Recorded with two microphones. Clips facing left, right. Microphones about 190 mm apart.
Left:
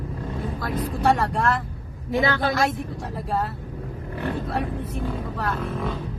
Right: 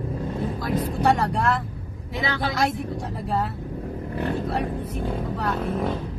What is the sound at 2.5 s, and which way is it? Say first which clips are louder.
Speech: left 1 dB; centre (ahead or behind).